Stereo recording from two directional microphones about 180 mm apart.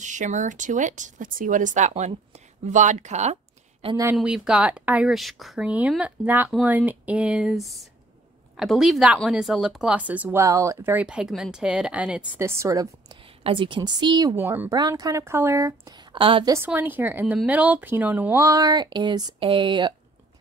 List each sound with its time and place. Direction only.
0.0 s speech: 45° right (ahead or behind)
3.8 s speech: 20° right (ahead or behind)
4.2 s speech: 5° right (ahead or behind)
13.4 s speech: 30° right (ahead or behind)
16.5 s speech: 10° right (ahead or behind); by 19.9 s 25° right (ahead or behind)